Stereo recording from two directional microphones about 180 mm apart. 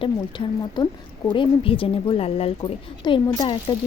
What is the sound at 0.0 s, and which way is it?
Speech, 25° left (ahead or behind).